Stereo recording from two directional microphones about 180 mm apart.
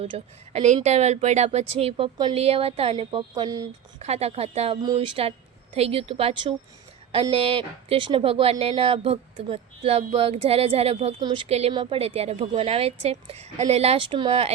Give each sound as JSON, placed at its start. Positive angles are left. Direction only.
{"t": 0.0, "sound": "speech", "side_deg": -35}
{"t": 4.0, "sound": "speech", "side_deg": -35}